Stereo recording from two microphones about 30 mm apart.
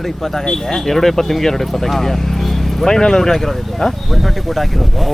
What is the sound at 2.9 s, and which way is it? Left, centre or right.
Speech, centre.